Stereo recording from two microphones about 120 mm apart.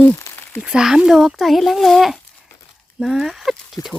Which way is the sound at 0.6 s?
5° right (ahead or behind).